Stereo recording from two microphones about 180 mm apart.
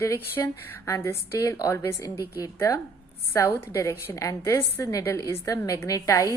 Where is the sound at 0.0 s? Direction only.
15° left (ahead or behind).